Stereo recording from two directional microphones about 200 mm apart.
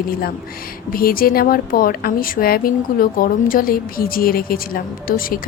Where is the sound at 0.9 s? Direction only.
45° left (ahead or behind).